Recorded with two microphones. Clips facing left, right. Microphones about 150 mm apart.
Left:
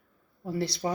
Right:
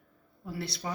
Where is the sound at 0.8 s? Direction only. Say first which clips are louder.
Left 6 dB; 30° left (ahead or behind).